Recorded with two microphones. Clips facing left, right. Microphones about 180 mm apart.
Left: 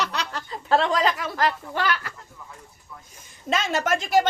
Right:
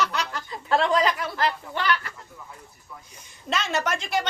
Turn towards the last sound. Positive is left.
turn(degrees=50)  # may be behind; listen again after turning